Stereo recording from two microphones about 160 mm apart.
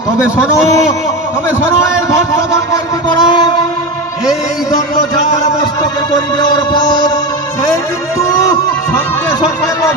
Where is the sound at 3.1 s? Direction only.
30° left (ahead or behind).